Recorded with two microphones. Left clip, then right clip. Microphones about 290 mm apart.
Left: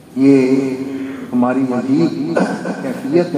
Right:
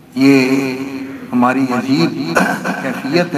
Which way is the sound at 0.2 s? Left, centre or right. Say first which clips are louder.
Even; right.